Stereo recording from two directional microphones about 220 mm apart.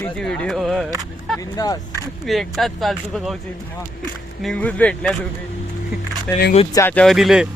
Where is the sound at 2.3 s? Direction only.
Centre (ahead or behind).